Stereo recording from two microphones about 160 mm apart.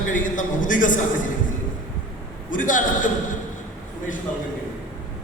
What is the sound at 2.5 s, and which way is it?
Speech, 55° left (ahead or behind).